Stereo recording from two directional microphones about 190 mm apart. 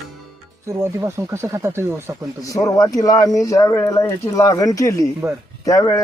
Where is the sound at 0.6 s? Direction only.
15° right (ahead or behind).